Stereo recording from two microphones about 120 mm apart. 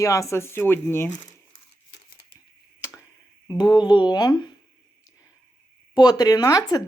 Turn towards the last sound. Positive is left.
turn(degrees=30)  # may be behind; listen again after turning